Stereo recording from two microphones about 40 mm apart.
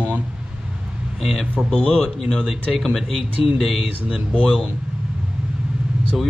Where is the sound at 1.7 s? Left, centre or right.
Centre.